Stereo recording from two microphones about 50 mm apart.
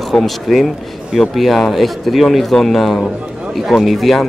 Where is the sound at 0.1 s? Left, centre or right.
Centre.